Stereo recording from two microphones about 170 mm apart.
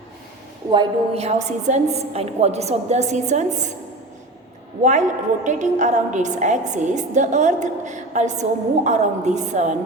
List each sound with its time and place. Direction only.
0.7 s a woman's voice: 30° right (ahead or behind)
4.8 s a woman's voice: 45° right (ahead or behind)